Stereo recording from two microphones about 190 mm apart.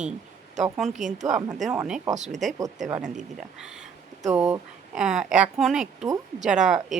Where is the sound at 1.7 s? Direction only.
15° right (ahead or behind).